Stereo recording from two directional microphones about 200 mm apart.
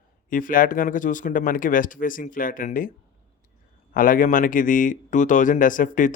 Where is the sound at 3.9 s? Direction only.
45° left (ahead or behind).